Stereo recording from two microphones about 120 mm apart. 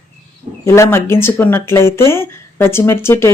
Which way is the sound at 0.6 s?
20° left (ahead or behind).